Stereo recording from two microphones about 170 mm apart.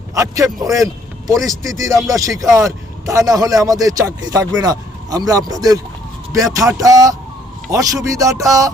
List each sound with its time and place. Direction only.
0.1 s a man's voice: 20° right (ahead or behind)